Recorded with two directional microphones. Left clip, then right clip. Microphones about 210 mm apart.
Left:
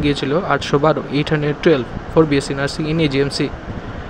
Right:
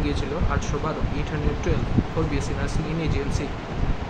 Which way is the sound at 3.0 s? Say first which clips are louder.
Left 14 dB; 30° left (ahead or behind).